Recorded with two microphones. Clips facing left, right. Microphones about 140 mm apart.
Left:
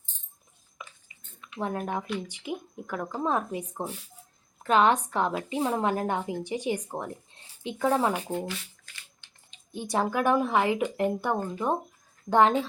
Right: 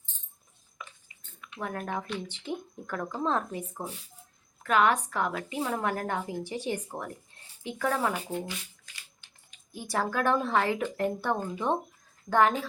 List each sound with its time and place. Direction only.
0.8 s dishes: 25° left (ahead or behind)
1.5 s a woman's voice: 25° left (ahead or behind)
9.5 s speech: 20° left (ahead or behind)
11.3 s speech: 5° right (ahead or behind)
12.3 s a woman's voice: 25° left (ahead or behind)